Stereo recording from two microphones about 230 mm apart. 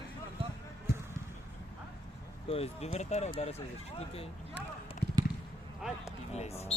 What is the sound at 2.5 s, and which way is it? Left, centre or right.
Speech, left.